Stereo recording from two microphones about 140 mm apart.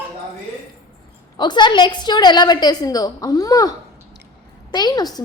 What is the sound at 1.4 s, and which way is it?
A woman's voice, 30° left (ahead or behind).